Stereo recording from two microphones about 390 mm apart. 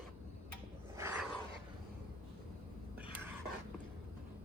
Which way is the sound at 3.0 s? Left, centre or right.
Centre.